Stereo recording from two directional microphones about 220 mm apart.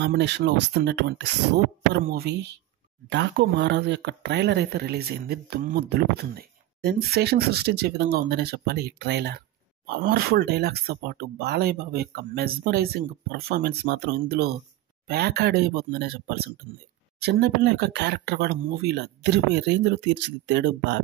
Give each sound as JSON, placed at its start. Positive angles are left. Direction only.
{"t": 0.0, "sound": "speech", "side_deg": -50}